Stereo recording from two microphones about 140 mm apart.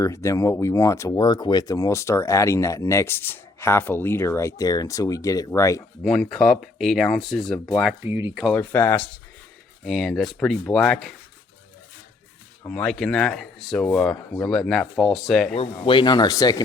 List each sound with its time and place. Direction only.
0.0 s speech: 20° left (ahead or behind)
6.0 s speech: 5° left (ahead or behind)
8.0 s speech: 15° right (ahead or behind)
8.5 s speech: 10° left (ahead or behind)
9.8 s speech: 5° left (ahead or behind)
12.6 s speech: 10° left (ahead or behind)
15.5 s speech: 40° left (ahead or behind); by 16.6 s 25° left (ahead or behind)